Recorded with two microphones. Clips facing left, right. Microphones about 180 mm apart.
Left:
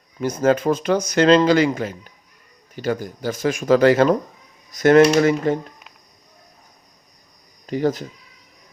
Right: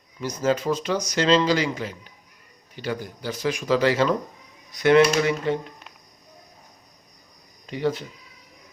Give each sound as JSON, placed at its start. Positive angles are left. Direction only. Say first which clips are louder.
{"t": 0.2, "sound": "speech", "louder": "left 5 dB", "side_deg": 50}
{"t": 7.7, "sound": "speech", "louder": "left 4 dB", "side_deg": 45}